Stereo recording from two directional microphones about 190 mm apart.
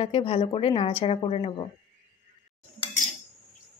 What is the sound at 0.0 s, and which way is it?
A woman's voice, 30° left (ahead or behind).